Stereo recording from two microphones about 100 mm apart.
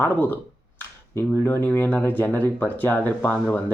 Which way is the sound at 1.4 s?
25° left (ahead or behind).